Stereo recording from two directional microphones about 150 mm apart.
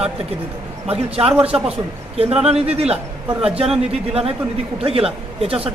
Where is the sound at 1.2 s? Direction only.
10° right (ahead or behind).